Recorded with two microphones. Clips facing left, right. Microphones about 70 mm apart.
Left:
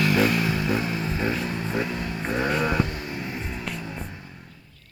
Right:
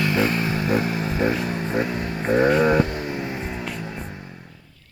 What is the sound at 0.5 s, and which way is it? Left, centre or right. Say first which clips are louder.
Vehicle: right 3 dB; right.